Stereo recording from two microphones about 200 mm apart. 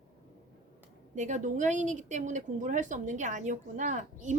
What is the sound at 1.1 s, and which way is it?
A woman's voice, 35° right (ahead or behind).